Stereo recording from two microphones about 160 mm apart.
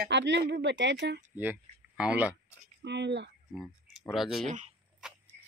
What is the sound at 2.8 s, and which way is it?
Speech, 90° right.